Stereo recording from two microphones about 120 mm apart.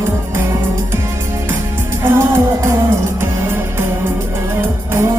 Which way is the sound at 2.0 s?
20° right (ahead or behind).